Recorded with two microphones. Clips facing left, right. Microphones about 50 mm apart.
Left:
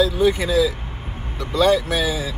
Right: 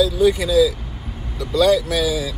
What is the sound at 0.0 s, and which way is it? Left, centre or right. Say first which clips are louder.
Speech: right 1 dB; left.